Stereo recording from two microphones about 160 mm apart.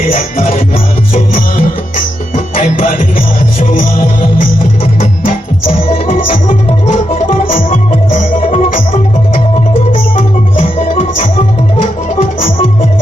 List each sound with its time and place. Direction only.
2.6 s music: 60° left (ahead or behind)
7.3 s music: 55° left (ahead or behind)
8.4 s music: 40° left (ahead or behind)
10.2 s music: 45° left (ahead or behind)